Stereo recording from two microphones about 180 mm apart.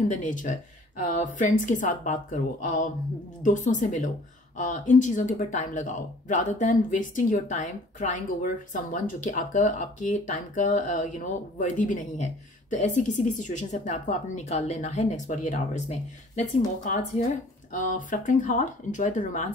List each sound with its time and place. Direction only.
0.1 s speech: 45° left (ahead or behind)